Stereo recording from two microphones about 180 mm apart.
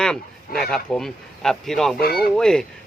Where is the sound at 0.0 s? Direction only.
5° left (ahead or behind).